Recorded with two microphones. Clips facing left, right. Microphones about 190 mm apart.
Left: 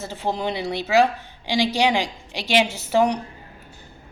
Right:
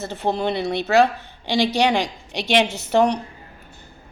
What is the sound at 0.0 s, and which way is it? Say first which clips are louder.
Speech: right 3 dB; 65° right (ahead or behind).